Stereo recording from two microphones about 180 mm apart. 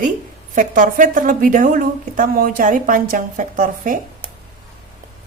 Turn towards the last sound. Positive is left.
turn(degrees=-50)  # may be behind; listen again after turning